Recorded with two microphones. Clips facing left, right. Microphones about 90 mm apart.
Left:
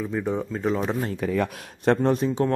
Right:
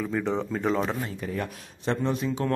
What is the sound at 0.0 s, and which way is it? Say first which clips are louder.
Speech: left 1 dB; 15° left (ahead or behind).